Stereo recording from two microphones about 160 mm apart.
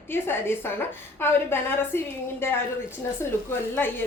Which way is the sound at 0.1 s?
15° left (ahead or behind).